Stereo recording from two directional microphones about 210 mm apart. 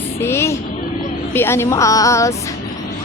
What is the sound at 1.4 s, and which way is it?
Speech, 10° left (ahead or behind).